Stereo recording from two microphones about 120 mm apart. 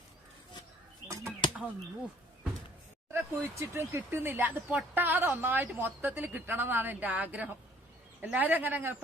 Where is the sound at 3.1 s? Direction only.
20° right (ahead or behind).